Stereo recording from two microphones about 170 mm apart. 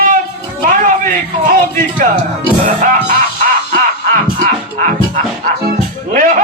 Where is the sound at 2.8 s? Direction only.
55° right (ahead or behind).